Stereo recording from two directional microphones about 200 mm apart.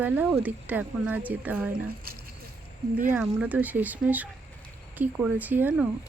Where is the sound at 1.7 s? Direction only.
50° right (ahead or behind).